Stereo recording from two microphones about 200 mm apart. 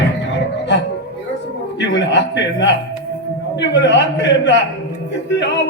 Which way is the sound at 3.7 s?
65° left (ahead or behind).